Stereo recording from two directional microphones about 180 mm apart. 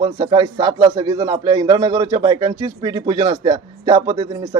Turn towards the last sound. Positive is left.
turn(degrees=-25)  # may be behind; listen again after turning